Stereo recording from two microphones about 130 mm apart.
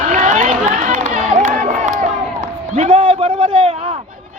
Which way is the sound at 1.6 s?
75° right (ahead or behind).